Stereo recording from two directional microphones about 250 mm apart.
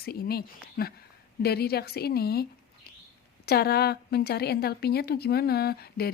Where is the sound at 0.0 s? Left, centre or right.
Left.